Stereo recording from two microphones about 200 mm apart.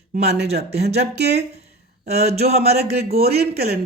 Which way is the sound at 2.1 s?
30° right (ahead or behind).